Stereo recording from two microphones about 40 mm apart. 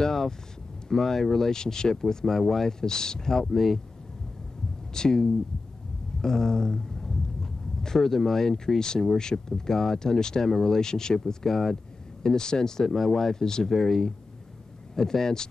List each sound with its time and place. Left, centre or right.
0.0 s a sound: centre
0.8 s speech: centre
3.5 s speech: centre
4.9 s speech: centre
6.2 s a sound: centre
8.5 s speech: centre
11.4 s speech: centre
12.8 s speech: centre
13.7 s speech: centre